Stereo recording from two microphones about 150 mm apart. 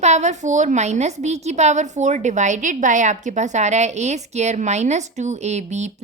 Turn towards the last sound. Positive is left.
turn(degrees=-50)  # may be behind; listen again after turning